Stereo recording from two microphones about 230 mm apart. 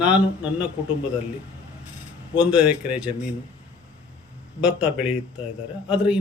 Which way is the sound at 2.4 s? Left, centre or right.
Centre.